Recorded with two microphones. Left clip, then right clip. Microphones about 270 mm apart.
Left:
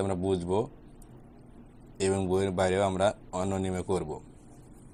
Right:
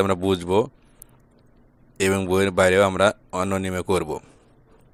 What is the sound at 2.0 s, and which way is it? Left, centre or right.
Speech, right.